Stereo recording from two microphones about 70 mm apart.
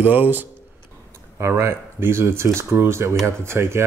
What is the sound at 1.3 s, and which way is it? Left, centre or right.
Speech, right.